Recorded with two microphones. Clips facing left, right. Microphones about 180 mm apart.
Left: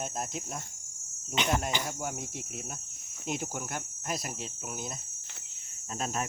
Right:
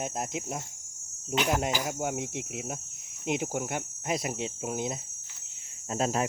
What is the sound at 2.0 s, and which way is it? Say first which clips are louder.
Speech: right 5 dB; 20° right (ahead or behind).